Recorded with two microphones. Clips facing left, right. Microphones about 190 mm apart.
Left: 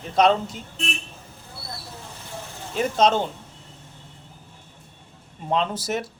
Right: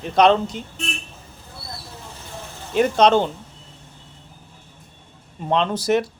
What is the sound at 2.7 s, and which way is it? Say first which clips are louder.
Speech: right 5 dB; 70° right (ahead or behind).